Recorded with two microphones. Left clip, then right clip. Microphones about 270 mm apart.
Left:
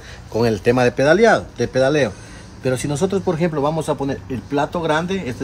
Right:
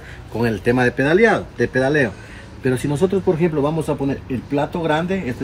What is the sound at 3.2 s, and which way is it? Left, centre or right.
Speech, centre.